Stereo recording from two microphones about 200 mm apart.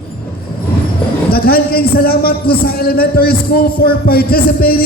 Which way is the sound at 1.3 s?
50° left (ahead or behind).